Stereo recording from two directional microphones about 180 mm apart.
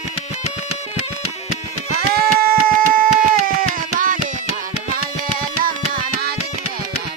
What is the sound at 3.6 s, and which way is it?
Music, 50° right (ahead or behind).